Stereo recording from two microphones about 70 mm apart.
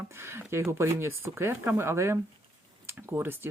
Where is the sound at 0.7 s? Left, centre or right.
Right.